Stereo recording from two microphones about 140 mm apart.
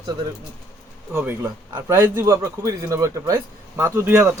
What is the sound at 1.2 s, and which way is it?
A man's voice, 20° right (ahead or behind).